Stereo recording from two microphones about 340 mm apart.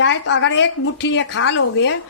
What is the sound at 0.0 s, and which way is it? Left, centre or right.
A woman's voice, left.